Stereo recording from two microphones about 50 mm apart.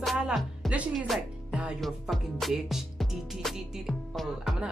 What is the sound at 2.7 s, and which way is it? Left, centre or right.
Speech, centre.